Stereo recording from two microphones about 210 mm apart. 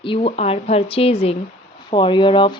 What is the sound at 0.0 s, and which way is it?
A woman's voice, 25° left (ahead or behind).